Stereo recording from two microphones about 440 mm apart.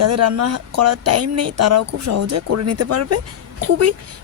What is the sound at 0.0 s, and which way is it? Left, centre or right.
Speech, right.